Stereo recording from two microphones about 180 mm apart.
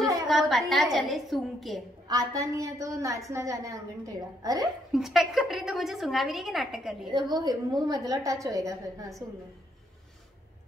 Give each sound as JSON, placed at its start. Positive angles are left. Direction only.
{"t": 0.3, "sound": "a woman's voice", "side_deg": 0}
{"t": 2.0, "sound": "a woman's voice", "side_deg": -20}
{"t": 4.9, "sound": "a woman's voice", "side_deg": 0}
{"t": 7.1, "sound": "a woman's voice", "side_deg": -25}